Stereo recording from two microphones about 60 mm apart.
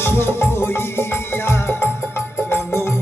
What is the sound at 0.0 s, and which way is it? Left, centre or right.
Music, left.